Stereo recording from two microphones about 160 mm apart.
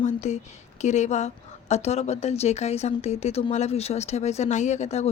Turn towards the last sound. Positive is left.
turn(degrees=45)  # may be behind; listen again after turning